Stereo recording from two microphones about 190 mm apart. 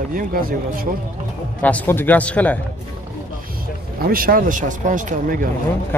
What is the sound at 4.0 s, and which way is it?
Speech, 50° right (ahead or behind).